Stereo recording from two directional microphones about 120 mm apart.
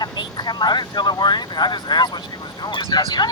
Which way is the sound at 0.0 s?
35° left (ahead or behind).